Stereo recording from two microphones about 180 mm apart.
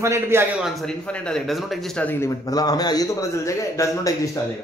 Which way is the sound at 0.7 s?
Centre (ahead or behind).